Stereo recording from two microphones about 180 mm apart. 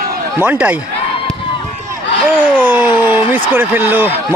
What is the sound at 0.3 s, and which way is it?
Speech, 10° right (ahead or behind).